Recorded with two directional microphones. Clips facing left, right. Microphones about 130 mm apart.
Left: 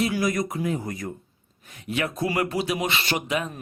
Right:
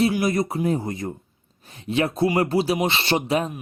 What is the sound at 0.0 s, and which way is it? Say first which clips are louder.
Speech: right 3 dB; 30° right (ahead or behind).